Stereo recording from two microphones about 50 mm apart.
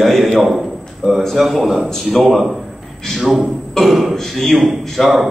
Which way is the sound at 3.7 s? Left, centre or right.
Centre.